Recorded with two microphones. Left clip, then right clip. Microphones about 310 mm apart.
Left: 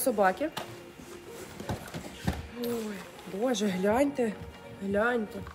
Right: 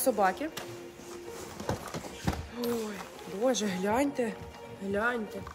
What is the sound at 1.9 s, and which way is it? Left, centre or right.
Clip-clop, right.